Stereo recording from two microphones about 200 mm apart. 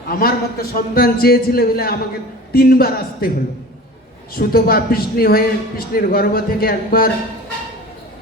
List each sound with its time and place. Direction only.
0.1 s a man's voice: 50° left (ahead or behind)
4.4 s a man's voice: 50° left (ahead or behind)